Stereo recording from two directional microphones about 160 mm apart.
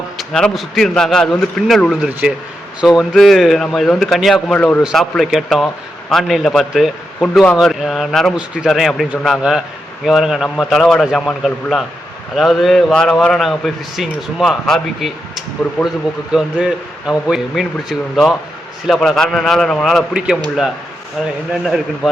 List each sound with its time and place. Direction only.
0.2 s a man's voice: 5° left (ahead or behind)
21.5 s a man's voice: centre (ahead or behind)